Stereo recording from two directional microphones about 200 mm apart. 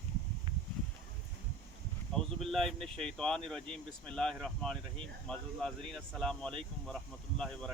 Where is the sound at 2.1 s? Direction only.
Centre (ahead or behind).